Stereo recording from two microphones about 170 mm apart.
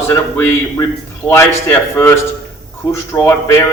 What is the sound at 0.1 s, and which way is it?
A man's voice, 15° left (ahead or behind).